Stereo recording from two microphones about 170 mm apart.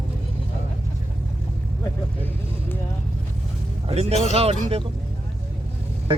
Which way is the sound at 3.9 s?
35° right (ahead or behind).